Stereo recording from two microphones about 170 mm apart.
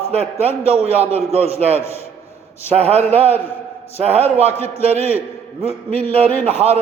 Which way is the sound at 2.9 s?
40° right (ahead or behind).